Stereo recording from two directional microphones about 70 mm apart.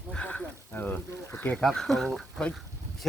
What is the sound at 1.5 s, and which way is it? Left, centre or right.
Speech, centre.